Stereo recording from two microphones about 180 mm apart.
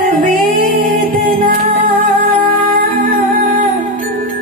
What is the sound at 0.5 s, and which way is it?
Music, 50° right (ahead or behind).